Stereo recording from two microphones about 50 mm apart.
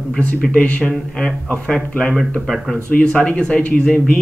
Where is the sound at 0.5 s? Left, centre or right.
Left.